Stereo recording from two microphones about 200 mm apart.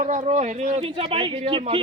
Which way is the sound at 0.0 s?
35° right (ahead or behind).